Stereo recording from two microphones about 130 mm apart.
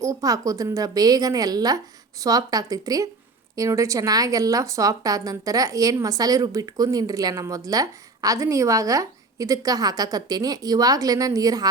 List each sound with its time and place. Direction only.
0.0 s speech: 25° right (ahead or behind)